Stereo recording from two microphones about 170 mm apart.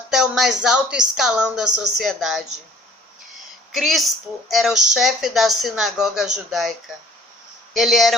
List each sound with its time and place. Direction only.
0.1 s speech: 5° right (ahead or behind)
3.7 s speech: centre (ahead or behind)